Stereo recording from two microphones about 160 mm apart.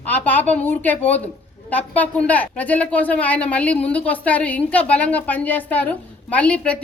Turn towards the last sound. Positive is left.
turn(degrees=10)  # may be behind; listen again after turning